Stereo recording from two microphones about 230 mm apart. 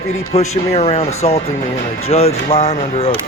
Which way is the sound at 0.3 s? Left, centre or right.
Left.